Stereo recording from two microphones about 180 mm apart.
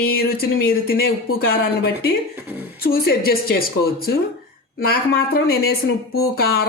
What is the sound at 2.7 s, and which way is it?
A woman's voice, 55° left (ahead or behind).